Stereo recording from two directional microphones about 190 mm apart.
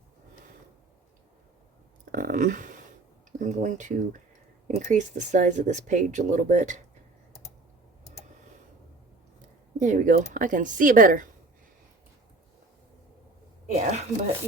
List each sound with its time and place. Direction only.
2.1 s speech: 45° right (ahead or behind)
9.7 s speech: 40° right (ahead or behind)
13.7 s a sound: 40° right (ahead or behind)